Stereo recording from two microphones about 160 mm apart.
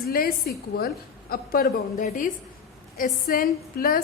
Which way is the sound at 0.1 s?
70° left (ahead or behind).